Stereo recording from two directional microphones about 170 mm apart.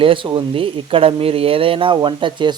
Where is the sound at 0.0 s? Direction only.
30° right (ahead or behind).